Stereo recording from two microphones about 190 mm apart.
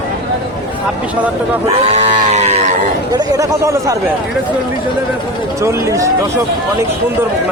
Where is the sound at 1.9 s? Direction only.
35° right (ahead or behind).